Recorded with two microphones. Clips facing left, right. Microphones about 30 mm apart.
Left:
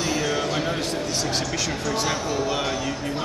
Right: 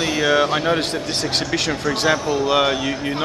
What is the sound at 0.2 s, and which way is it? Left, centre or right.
Speech, right.